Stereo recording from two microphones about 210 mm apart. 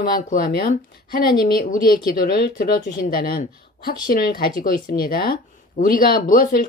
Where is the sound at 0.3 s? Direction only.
45° left (ahead or behind).